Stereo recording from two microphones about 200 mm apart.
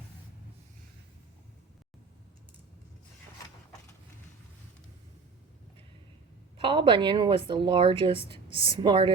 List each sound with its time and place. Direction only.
6.6 s a woman's voice: 25° right (ahead or behind)